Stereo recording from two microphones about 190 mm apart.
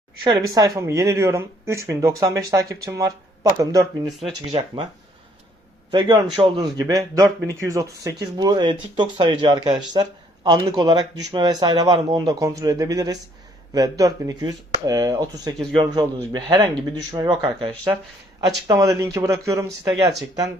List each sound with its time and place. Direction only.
0.3 s speech: 20° right (ahead or behind)
5.9 s speech: 25° right (ahead or behind)